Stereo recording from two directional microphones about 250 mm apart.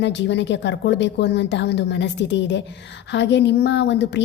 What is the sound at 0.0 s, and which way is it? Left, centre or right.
A woman's voice, left.